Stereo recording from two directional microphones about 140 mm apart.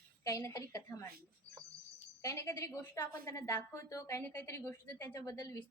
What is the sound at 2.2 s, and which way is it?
A woman's voice, 20° left (ahead or behind).